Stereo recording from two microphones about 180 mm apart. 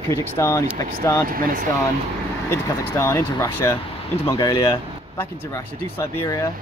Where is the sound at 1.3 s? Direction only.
50° right (ahead or behind).